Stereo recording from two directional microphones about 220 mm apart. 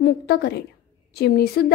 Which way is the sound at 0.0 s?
50° left (ahead or behind).